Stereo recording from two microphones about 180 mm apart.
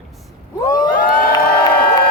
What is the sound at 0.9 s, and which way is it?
Cheering, 50° left (ahead or behind).